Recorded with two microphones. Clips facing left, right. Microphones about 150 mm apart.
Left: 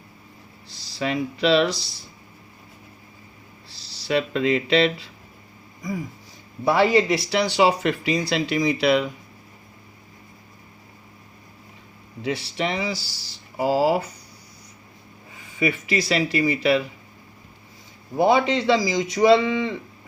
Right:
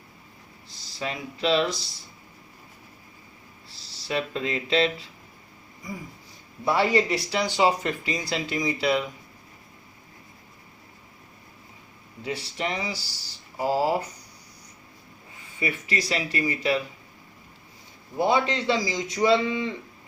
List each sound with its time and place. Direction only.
0.9 s speech: 80° left
3.8 s speech: 85° left
6.7 s speech: 90° left
12.2 s a man's voice: 85° left
15.5 s a man's voice: 90° left
18.3 s a man's voice: 90° left